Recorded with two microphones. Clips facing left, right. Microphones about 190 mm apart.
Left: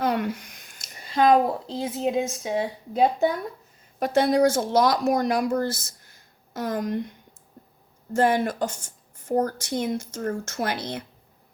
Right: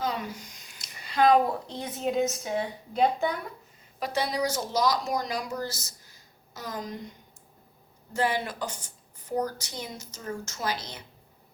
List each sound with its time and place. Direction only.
0.0 s a sound: 60° left (ahead or behind)
1.2 s a woman's voice: 35° left (ahead or behind)
4.0 s speech: 50° left (ahead or behind)
8.1 s a woman's voice: 50° left (ahead or behind)